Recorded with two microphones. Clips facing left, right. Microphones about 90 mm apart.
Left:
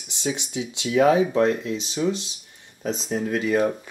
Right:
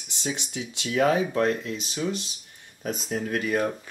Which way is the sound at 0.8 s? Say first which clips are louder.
Left 5 dB; 15° left (ahead or behind).